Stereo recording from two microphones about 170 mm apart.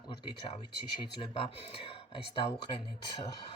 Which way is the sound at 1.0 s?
30° left (ahead or behind).